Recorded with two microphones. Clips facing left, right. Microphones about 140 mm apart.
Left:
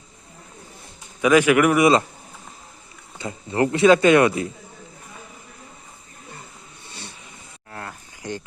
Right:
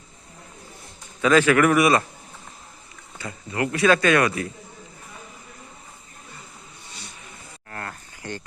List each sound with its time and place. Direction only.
1.2 s a man's voice: 15° left (ahead or behind)
3.2 s speech: 25° left (ahead or behind)
7.7 s insect: 5° left (ahead or behind)